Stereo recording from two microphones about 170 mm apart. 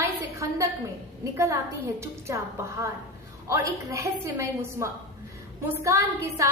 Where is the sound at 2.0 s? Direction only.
15° right (ahead or behind).